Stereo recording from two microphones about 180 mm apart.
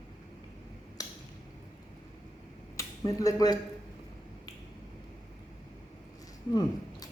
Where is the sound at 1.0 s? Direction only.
20° left (ahead or behind).